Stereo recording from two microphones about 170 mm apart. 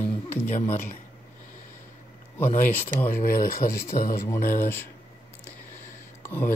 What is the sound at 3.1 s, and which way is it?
Speech, 55° left (ahead or behind).